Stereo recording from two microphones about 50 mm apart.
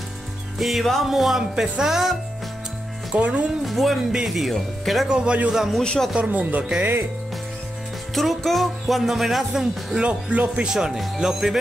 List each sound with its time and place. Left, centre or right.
0.6 s speech: centre
3.2 s speech: right
3.6 s speech: centre
5.0 s speech: centre
5.7 s speech: centre
6.1 s speech: right
8.1 s speech: centre
10.3 s speech: right
10.7 s speech: centre